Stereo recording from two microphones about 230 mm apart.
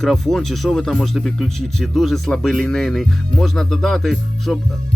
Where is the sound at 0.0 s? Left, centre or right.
Centre.